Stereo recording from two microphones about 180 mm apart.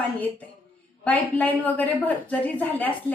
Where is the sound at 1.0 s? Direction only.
10° left (ahead or behind).